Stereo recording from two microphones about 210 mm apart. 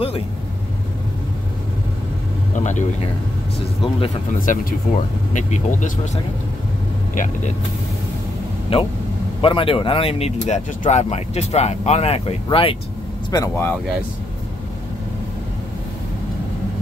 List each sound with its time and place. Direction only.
2.5 s speech: 35° left (ahead or behind)
4.4 s speech: 40° left (ahead or behind)
9.4 s speech: 25° left (ahead or behind)
13.3 s speech: 15° left (ahead or behind)